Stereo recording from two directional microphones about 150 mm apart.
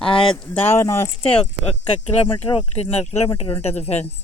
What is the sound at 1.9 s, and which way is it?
Speech, 35° left (ahead or behind).